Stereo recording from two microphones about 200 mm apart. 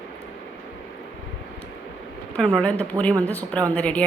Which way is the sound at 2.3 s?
5° left (ahead or behind).